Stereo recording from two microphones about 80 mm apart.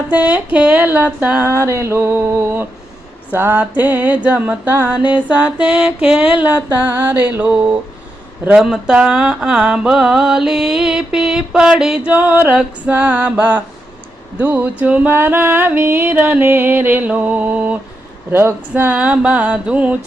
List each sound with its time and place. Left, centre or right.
0.1 s music: centre
1.5 s a sound: right
3.3 s music: right
5.0 s mantra: centre
6.4 s music: right
8.4 s mantra: centre
12.1 s music: right
18.3 s a sound: right
18.7 s mantra: right